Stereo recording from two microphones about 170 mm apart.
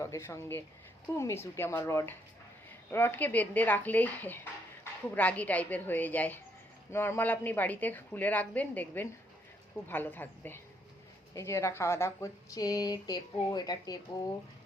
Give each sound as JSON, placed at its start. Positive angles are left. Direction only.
{"t": 0.0, "sound": "a woman's voice", "side_deg": 15}